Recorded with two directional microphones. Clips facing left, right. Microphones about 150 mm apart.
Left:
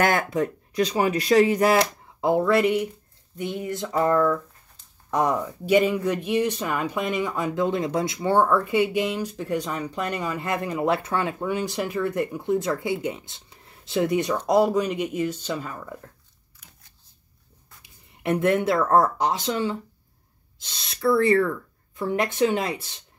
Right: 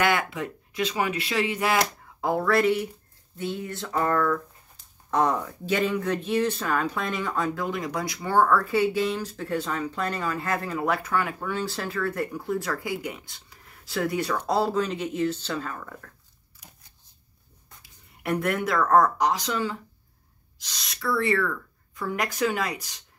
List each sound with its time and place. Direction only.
0.0 s speech: 45° left (ahead or behind)
2.2 s speech: 20° left (ahead or behind)
18.2 s speech: 20° left (ahead or behind)